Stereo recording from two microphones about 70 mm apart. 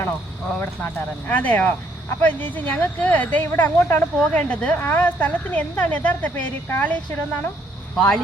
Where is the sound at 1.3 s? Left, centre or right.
Left.